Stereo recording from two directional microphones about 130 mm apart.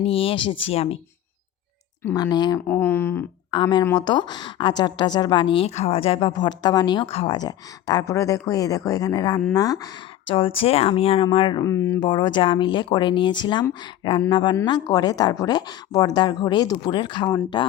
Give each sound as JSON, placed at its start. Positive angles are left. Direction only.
{"t": 0.0, "sound": "speech", "side_deg": 45}
{"t": 2.1, "sound": "a woman's voice", "side_deg": 30}
{"t": 2.6, "sound": "speech", "side_deg": 15}
{"t": 3.5, "sound": "a woman's voice", "side_deg": 35}
{"t": 7.1, "sound": "speech", "side_deg": 45}
{"t": 7.3, "sound": "speech", "side_deg": 30}
{"t": 10.2, "sound": "speech", "side_deg": 45}
{"t": 11.6, "sound": "speech", "side_deg": 20}
{"t": 12.0, "sound": "a woman's voice", "side_deg": 35}